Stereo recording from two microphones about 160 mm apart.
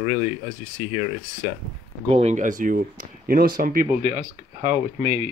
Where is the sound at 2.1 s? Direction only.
45° right (ahead or behind); by 3.9 s 60° right (ahead or behind).